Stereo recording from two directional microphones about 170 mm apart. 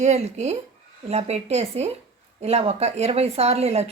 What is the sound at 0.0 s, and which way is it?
Speech, 40° right (ahead or behind).